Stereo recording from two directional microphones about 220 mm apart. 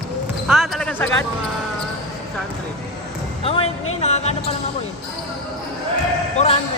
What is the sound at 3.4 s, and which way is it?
Speech, 25° left (ahead or behind).